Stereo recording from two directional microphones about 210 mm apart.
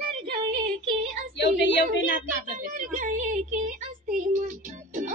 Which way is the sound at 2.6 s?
40° right (ahead or behind).